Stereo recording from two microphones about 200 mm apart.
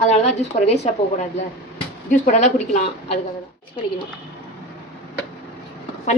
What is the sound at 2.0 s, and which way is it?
A woman's voice, 40° left (ahead or behind).